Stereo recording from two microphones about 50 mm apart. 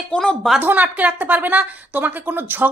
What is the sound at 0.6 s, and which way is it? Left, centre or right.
A woman's voice, right.